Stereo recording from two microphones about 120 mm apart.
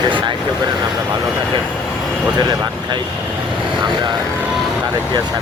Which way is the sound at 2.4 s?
35° right (ahead or behind).